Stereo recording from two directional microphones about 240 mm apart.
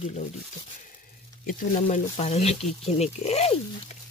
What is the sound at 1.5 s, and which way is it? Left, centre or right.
Speech, left.